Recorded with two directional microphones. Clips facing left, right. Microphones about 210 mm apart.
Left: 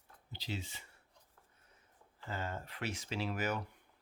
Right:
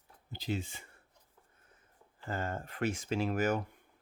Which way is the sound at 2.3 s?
50° right (ahead or behind).